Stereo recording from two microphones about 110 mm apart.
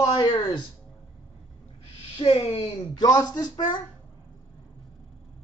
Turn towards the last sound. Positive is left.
turn(degrees=40)  # may be behind; listen again after turning